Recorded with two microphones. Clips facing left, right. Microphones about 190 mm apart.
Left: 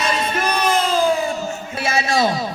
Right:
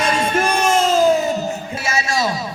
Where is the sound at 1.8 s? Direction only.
55° left (ahead or behind).